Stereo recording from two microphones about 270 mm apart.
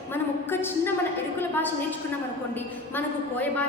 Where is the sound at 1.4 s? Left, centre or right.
Centre.